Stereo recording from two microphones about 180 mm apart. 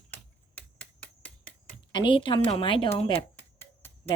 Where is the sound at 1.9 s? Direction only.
25° left (ahead or behind).